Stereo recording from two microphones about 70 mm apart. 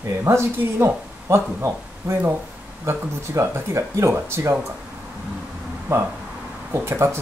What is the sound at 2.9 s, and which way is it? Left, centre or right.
Speech, right.